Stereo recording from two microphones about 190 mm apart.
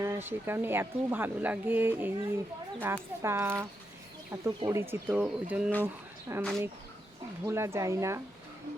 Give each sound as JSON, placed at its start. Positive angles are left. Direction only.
{"t": 0.0, "sound": "speech", "side_deg": -10}
{"t": 7.4, "sound": "speech", "side_deg": -15}